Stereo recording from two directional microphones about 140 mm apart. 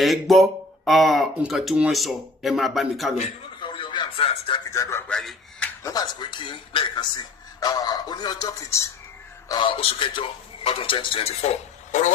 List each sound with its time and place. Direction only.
0.0 s speech: centre (ahead or behind)
3.6 s radio: 35° left (ahead or behind)
4.7 s speech: 20° left (ahead or behind)
5.1 s a sound: 5° left (ahead or behind)
5.8 s a man's voice: 25° left (ahead or behind)
9.5 s a man's voice: 35° left (ahead or behind); by 12.1 s 60° left (ahead or behind)